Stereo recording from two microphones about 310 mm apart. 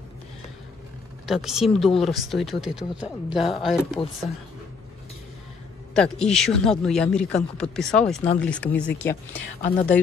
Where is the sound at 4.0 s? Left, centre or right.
Centre.